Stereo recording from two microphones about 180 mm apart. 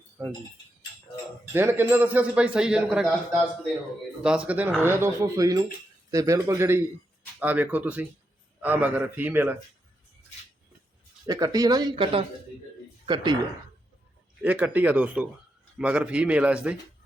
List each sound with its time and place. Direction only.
0.2 s a man's voice: 10° right (ahead or behind)
1.5 s a man's voice: 10° right (ahead or behind)
4.2 s a man's voice: 5° right (ahead or behind)
11.3 s speech: 20° right (ahead or behind)
14.4 s a man's voice: 10° right (ahead or behind)